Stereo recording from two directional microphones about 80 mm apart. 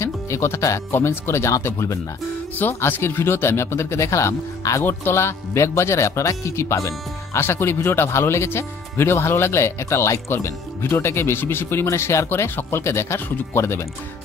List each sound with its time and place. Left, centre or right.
0.0 s music: left
0.9 s speech: left